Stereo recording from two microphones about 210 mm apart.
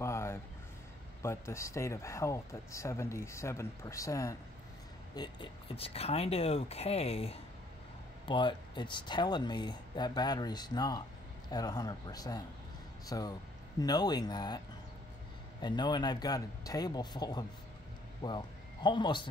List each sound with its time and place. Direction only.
0.0 s a sound: 15° left (ahead or behind)
1.2 s speech: 15° left (ahead or behind)
15.6 s a man's voice: 20° left (ahead or behind)